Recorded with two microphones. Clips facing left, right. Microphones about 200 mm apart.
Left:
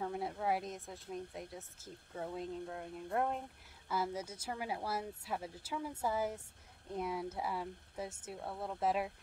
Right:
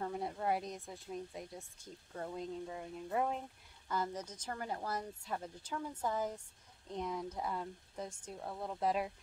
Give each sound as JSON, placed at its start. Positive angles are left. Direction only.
{"t": 0.0, "sound": "a woman's voice", "side_deg": 0}